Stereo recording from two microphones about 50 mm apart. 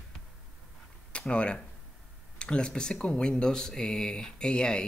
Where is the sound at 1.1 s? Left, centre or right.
Left.